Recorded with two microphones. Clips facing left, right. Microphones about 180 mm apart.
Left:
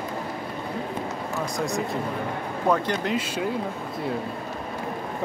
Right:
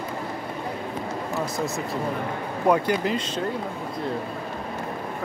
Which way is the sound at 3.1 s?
10° left (ahead or behind).